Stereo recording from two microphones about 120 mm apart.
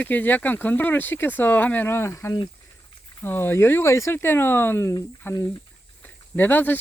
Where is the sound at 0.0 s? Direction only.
15° left (ahead or behind).